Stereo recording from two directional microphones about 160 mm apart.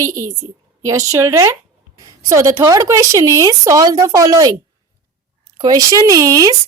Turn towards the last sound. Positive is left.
turn(degrees=-20)  # may be behind; listen again after turning